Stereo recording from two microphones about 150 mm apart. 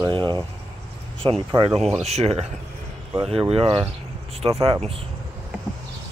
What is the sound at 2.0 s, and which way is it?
Speech, 45° right (ahead or behind).